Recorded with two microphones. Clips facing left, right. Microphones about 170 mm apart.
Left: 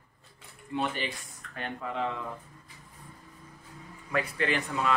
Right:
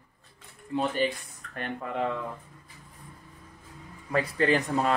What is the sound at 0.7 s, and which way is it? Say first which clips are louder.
Speech: right 5 dB; 35° right (ahead or behind).